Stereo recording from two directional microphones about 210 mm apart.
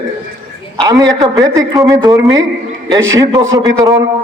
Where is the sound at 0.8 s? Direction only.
15° right (ahead or behind).